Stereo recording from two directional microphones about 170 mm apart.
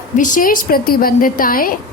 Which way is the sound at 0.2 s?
50° left (ahead or behind).